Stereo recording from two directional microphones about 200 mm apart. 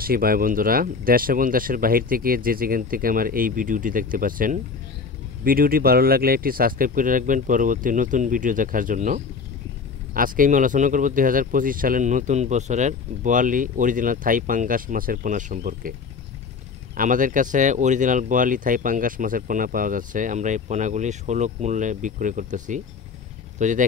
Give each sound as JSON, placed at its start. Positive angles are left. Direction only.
{"t": 0.0, "sound": "speech", "side_deg": -45}
{"t": 16.9, "sound": "speech", "side_deg": -40}